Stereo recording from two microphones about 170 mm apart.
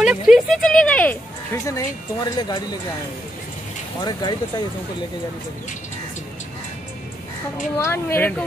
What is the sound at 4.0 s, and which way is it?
Speech, 25° left (ahead or behind).